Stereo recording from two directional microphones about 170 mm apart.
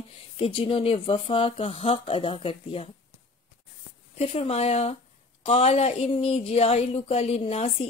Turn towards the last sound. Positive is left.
turn(degrees=35)  # may be behind; listen again after turning